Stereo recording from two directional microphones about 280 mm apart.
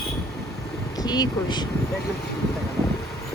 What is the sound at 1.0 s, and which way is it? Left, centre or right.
Speech, centre.